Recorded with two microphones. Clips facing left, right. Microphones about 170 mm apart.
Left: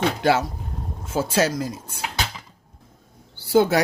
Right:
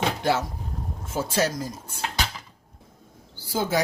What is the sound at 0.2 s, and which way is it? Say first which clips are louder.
Speech: left 6 dB; 75° left (ahead or behind).